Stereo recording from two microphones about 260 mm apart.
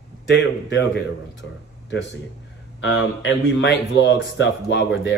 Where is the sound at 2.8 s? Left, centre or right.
Left.